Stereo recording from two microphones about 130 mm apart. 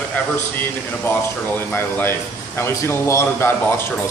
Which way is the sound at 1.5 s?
15° left (ahead or behind).